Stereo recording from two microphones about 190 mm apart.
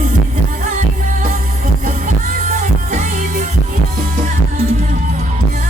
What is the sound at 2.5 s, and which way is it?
Music, 40° right (ahead or behind).